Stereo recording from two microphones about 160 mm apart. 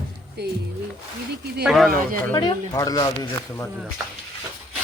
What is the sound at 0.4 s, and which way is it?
Speech, 90° right.